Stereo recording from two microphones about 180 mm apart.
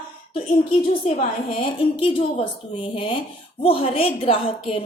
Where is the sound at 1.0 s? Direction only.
35° left (ahead or behind).